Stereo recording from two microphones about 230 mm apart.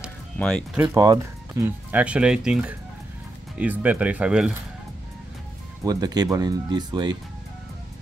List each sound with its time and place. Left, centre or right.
0.0 s music: centre
0.9 s speech: centre
5.9 s speech: centre